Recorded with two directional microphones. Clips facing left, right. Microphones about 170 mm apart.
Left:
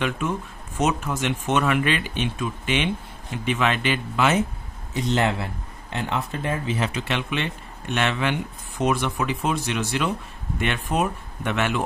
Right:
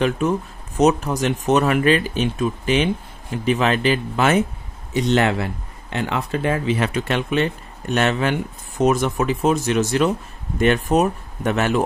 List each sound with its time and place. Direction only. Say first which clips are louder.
0.0 s speech: right 6 dB; 40° right (ahead or behind)
4.9 s speech: right 5 dB; 75° right (ahead or behind)
6.9 s speech: right 5 dB; 45° right (ahead or behind)